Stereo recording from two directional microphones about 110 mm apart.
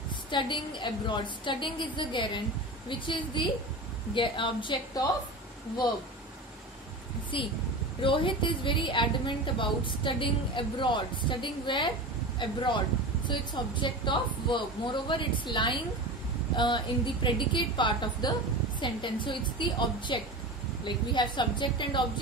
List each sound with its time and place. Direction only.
0.3 s a woman's voice: 45° left (ahead or behind)
7.3 s a woman's voice: 50° left (ahead or behind)